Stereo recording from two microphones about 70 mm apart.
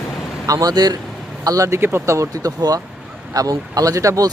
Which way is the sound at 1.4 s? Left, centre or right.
Right.